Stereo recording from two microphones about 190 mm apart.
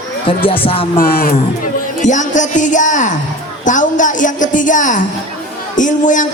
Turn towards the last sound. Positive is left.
turn(degrees=40)  # may be behind; listen again after turning